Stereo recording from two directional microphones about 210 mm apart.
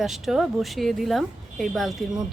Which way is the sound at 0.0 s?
Centre (ahead or behind).